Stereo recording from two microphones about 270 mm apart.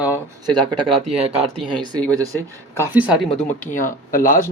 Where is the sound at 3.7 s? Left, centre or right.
Left.